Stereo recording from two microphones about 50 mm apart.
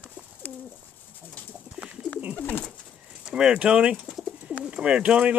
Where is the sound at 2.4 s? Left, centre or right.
Left.